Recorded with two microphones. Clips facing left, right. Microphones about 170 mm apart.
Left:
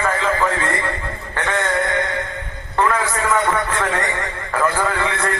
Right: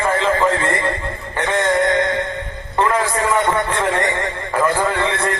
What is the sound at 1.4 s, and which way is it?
Music, 30° right (ahead or behind).